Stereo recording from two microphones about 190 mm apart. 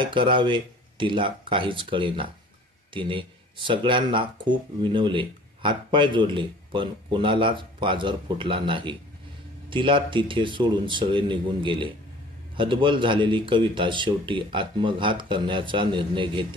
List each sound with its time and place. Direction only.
0.0 s speech: 25° right (ahead or behind)